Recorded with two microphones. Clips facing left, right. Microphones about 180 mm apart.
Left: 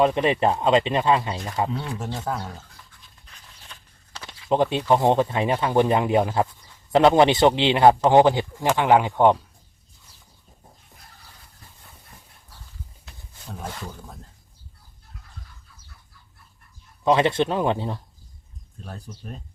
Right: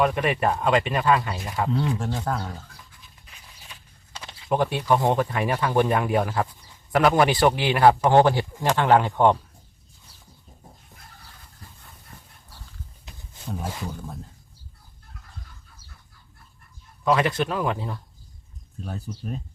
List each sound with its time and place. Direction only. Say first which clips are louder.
0.0 s speech: left 3 dB; 25° left (ahead or behind)
2.2 s speech: right 1 dB; centre (ahead or behind)
3.7 s walk: even; 10° right (ahead or behind)
4.4 s speech: left 2 dB; 20° left (ahead or behind)
13.1 s roaring cats: right 2 dB; 15° right (ahead or behind)
13.5 s speech: right 3 dB; 5° right (ahead or behind)
17.0 s speech: left 3 dB; 25° left (ahead or behind)
18.8 s speech: right 5 dB; centre (ahead or behind)